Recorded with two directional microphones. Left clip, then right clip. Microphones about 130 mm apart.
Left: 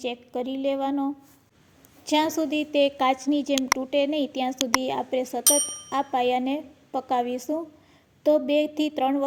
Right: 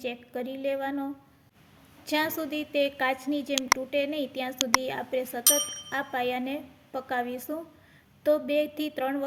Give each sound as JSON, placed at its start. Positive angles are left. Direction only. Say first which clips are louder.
{"t": 0.0, "sound": "a woman's voice", "louder": "left 4 dB", "side_deg": 25}
{"t": 3.5, "sound": "speech", "louder": "even", "side_deg": 0}
{"t": 3.8, "sound": "speech", "louder": "left 5 dB", "side_deg": 25}
{"t": 4.5, "sound": "speech", "louder": "right 2 dB", "side_deg": 0}
{"t": 4.8, "sound": "speech", "louder": "left 4 dB", "side_deg": 25}
{"t": 5.4, "sound": "speech", "louder": "left 2 dB", "side_deg": 0}
{"t": 5.9, "sound": "speech", "louder": "left 7 dB", "side_deg": 25}